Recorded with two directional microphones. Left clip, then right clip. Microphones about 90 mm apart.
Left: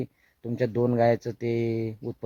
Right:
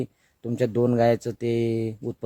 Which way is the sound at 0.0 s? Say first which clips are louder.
Right 3 dB; 30° right (ahead or behind).